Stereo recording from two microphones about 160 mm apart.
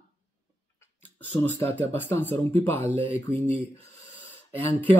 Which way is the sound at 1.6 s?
15° left (ahead or behind).